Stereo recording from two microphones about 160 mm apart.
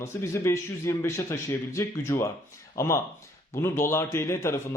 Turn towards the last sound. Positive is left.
turn(degrees=15)  # may be behind; listen again after turning